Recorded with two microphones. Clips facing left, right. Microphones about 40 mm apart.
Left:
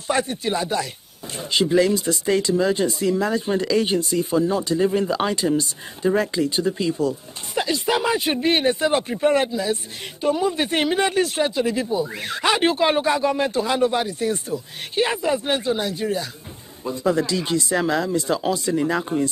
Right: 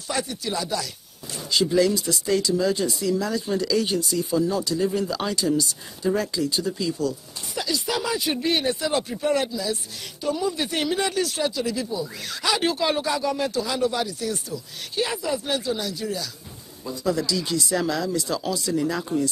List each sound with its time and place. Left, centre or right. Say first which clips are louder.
0.1 s speech: left 5 dB; left